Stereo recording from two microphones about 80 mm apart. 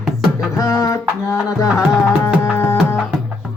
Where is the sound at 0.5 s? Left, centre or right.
Left.